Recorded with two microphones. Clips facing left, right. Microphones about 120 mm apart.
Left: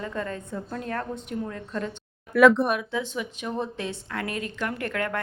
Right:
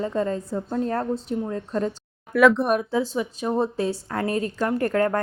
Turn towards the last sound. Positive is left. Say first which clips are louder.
# right 8 dB
turn(degrees=-40)  # may be behind; listen again after turning